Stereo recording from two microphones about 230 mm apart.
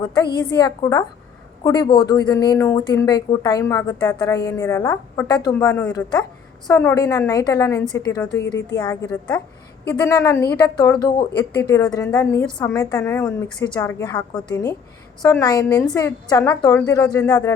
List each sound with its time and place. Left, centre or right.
0.0 s a woman's voice: centre